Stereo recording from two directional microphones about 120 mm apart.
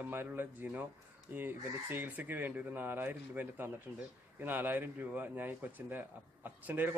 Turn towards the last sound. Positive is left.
turn(degrees=-15)  # may be behind; listen again after turning